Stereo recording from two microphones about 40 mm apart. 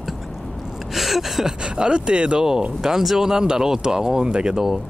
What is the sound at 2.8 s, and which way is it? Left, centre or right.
Speech, centre.